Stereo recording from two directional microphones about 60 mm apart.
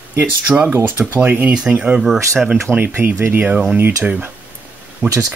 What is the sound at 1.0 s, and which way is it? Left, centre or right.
Speech, right.